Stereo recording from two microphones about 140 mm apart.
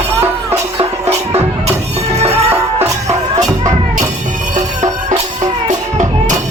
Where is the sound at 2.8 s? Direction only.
20° right (ahead or behind).